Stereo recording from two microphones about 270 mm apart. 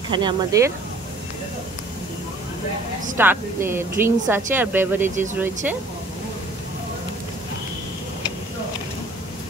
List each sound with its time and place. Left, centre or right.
0.1 s speech: centre
3.2 s speech: centre